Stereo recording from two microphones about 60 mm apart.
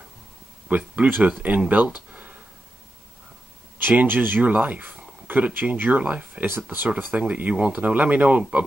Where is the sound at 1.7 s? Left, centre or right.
Right.